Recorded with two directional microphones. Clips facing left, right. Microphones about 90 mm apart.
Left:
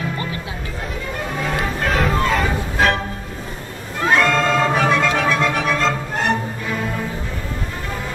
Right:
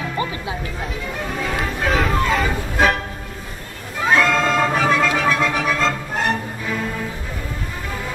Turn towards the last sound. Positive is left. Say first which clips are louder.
# left 2 dB
turn(degrees=0)  # may be behind; listen again after turning